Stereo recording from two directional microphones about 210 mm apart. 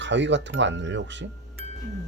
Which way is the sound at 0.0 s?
60° right (ahead or behind).